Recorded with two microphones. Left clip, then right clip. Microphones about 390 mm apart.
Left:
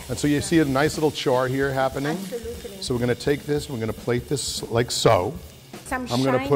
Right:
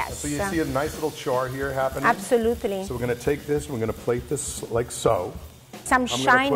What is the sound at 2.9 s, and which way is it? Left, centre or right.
Speech, left.